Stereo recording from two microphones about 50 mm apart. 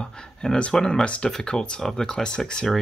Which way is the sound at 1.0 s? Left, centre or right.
Left.